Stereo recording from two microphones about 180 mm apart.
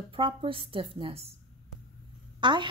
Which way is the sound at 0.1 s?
30° right (ahead or behind).